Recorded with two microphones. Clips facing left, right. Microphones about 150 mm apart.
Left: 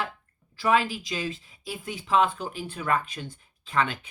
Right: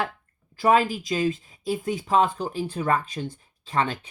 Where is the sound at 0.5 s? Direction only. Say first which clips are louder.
Right 4 dB; 45° right (ahead or behind).